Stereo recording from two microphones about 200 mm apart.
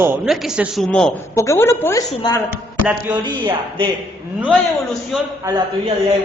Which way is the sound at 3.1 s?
20° right (ahead or behind).